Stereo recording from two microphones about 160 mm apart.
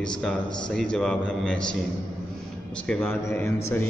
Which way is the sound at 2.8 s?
10° left (ahead or behind).